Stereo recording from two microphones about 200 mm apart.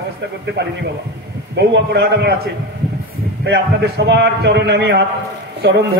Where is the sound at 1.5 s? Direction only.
55° right (ahead or behind).